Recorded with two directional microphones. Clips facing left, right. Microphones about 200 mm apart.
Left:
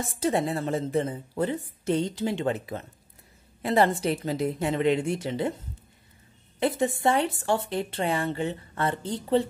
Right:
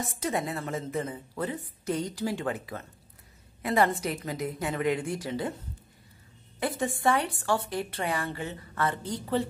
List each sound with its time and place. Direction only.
0.0 s a woman's voice: 30° left (ahead or behind)
6.8 s a woman's voice: 25° left (ahead or behind)